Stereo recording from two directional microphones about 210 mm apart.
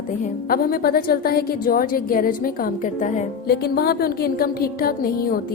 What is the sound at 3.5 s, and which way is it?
A woman's voice, 45° left (ahead or behind).